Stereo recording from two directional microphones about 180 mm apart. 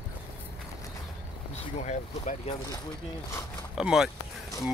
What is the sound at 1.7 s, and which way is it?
Speech, 40° left (ahead or behind).